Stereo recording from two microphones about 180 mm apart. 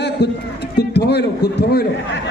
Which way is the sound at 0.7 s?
65° left (ahead or behind).